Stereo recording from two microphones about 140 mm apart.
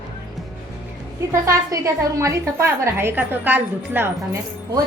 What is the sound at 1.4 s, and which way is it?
A woman's voice, 25° right (ahead or behind).